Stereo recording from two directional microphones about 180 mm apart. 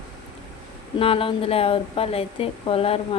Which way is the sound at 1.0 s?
30° left (ahead or behind).